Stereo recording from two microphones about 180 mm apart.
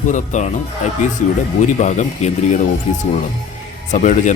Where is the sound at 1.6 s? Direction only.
40° left (ahead or behind).